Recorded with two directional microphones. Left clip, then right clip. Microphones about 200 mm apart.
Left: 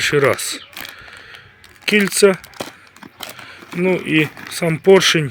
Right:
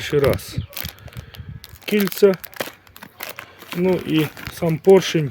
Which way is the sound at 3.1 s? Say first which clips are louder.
Left 1 dB; 25° right (ahead or behind).